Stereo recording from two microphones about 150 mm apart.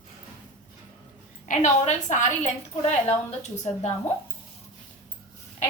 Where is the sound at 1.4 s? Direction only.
55° left (ahead or behind).